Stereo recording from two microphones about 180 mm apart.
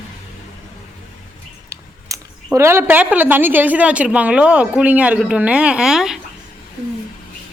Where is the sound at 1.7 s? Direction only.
20° right (ahead or behind).